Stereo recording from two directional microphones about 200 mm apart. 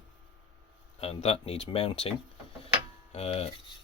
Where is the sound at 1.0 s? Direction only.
30° left (ahead or behind).